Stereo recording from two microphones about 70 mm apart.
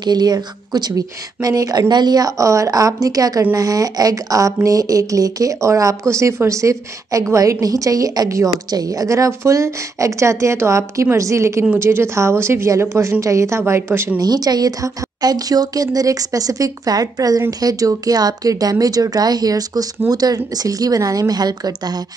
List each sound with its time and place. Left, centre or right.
0.0 s a woman's voice: right
13.2 s a woman's voice: right
14.1 s speech: right